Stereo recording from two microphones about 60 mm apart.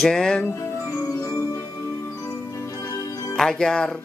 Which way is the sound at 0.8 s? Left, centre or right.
Left.